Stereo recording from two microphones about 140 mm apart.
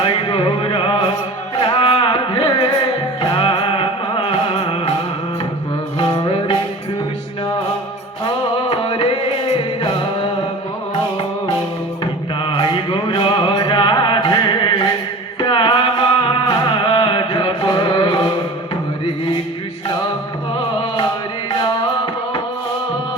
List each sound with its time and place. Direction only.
0.0 s music: 40° left (ahead or behind)
6.0 s music: 40° left (ahead or behind)
8.7 s music: 45° left (ahead or behind)
12.5 s music: 35° left (ahead or behind)